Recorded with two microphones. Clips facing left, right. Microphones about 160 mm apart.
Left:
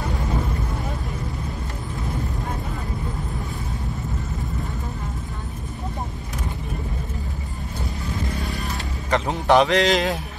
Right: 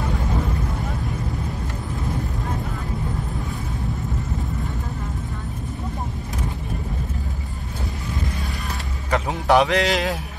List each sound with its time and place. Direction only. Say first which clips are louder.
9.1 s a man's voice: even; 10° right (ahead or behind)